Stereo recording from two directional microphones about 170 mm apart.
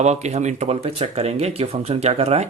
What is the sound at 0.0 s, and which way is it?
Speech, 40° right (ahead or behind).